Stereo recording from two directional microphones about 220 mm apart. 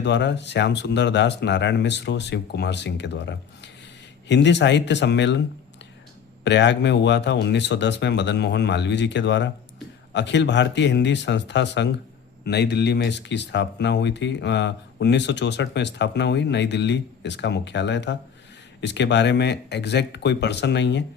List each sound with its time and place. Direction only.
0.0 s speech: 50° left (ahead or behind)
6.4 s speech: 55° left (ahead or behind)